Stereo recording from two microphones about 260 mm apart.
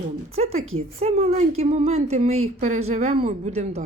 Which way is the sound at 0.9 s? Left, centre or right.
Right.